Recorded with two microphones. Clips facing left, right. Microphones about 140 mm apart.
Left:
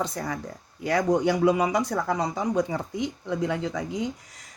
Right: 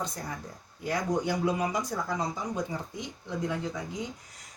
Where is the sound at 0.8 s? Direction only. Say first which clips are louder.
Left 7 dB; 80° left.